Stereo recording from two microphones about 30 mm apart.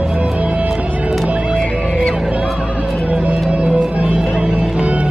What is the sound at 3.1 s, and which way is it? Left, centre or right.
Music, right.